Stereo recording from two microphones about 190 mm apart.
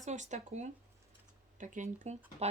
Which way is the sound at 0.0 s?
40° right (ahead or behind).